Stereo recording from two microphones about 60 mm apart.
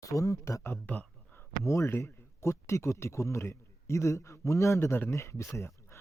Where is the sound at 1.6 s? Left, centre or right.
Left.